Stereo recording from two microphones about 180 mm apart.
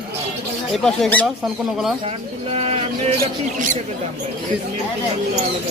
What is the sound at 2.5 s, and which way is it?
Speech, 35° right (ahead or behind).